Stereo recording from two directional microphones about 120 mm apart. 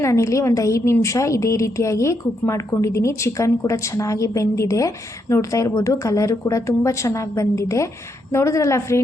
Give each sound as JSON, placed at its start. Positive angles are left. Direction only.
{"t": 0.0, "sound": "a woman's voice", "side_deg": 25}